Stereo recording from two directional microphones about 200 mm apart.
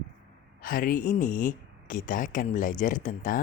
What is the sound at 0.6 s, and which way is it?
Speech, 45° left (ahead or behind).